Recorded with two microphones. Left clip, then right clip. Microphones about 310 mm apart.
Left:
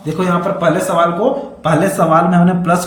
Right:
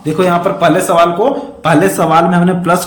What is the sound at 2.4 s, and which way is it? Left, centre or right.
Speech, centre.